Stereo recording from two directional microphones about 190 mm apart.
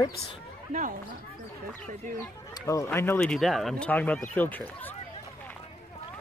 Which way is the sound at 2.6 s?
15° left (ahead or behind).